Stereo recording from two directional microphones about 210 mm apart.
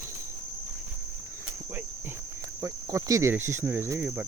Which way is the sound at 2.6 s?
15° right (ahead or behind).